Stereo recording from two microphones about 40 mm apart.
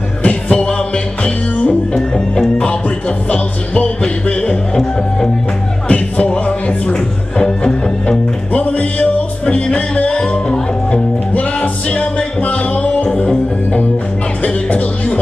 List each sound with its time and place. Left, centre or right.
0.2 s music: left
8.5 s music: left
10.1 s music: left
11.3 s music: left
14.4 s music: left